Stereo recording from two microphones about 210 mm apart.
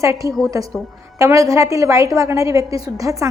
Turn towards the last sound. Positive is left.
turn(degrees=-15)  # may be behind; listen again after turning